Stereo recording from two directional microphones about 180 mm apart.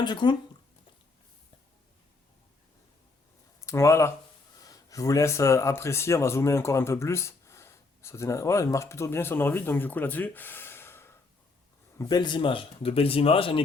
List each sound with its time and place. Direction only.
0.0 s speech: 25° left (ahead or behind)
3.7 s speech: 15° left (ahead or behind)
11.9 s speech: 25° left (ahead or behind)